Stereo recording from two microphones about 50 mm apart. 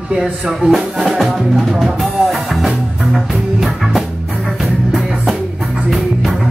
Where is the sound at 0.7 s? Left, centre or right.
Centre.